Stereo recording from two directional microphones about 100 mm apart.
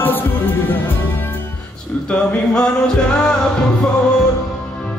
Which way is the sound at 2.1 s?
5° left (ahead or behind).